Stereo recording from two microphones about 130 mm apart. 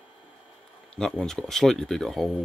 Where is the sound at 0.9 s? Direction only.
5° left (ahead or behind).